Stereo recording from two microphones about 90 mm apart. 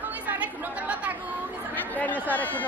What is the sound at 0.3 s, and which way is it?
Chatter, 15° right (ahead or behind).